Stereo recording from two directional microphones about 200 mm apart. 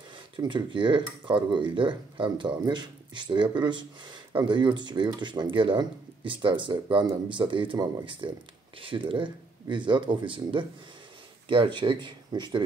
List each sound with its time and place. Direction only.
0.4 s speech: 25° right (ahead or behind)